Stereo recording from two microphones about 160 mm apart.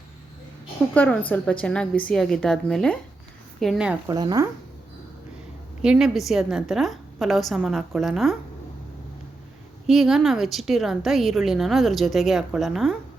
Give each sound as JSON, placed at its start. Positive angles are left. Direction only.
{"t": 0.9, "sound": "a woman's voice", "side_deg": 10}
{"t": 4.1, "sound": "speech", "side_deg": -25}
{"t": 5.8, "sound": "speech", "side_deg": -5}
{"t": 9.8, "sound": "speech", "side_deg": -5}